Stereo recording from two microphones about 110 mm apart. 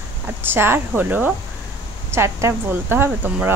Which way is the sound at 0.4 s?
20° right (ahead or behind).